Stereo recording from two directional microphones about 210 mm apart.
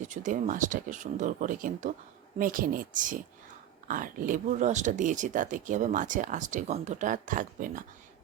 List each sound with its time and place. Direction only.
0.0 s speech: 35° right (ahead or behind)